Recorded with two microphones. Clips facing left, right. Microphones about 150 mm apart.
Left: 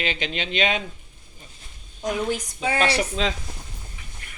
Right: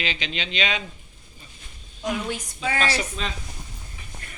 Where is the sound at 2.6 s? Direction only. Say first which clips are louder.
Left 1 dB; 25° left (ahead or behind).